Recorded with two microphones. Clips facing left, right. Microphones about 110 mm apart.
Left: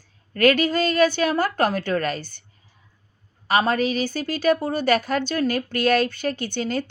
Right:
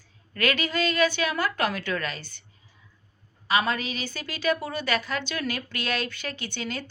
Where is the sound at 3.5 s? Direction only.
45° left (ahead or behind).